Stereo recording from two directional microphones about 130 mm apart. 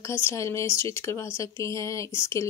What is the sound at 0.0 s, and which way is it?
Speech, 20° left (ahead or behind).